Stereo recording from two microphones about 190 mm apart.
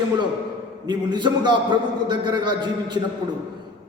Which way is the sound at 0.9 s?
25° right (ahead or behind).